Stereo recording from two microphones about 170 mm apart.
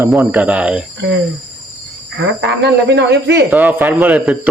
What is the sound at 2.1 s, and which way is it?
Speech, 90° right.